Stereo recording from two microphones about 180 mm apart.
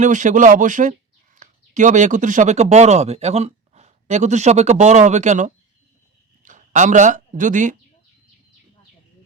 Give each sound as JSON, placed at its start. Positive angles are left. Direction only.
{"t": 0.0, "sound": "speech", "side_deg": -45}